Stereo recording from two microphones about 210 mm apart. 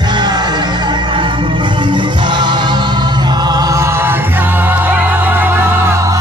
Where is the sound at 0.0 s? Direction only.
20° right (ahead or behind).